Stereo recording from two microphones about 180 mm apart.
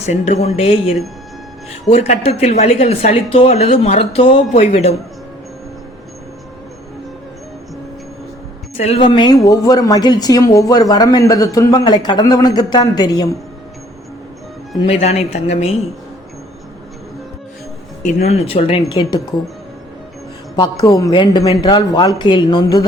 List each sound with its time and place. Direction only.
0.0 s speech: 40° left (ahead or behind)
8.8 s a woman's voice: 30° left (ahead or behind)
14.8 s speech: 35° left (ahead or behind)
18.0 s speech: 35° left (ahead or behind)
20.6 s a woman's voice: 20° left (ahead or behind)